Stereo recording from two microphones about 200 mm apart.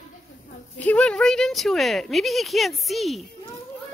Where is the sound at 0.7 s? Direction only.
5° left (ahead or behind).